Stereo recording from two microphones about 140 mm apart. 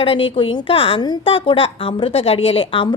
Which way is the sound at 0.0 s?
40° left (ahead or behind).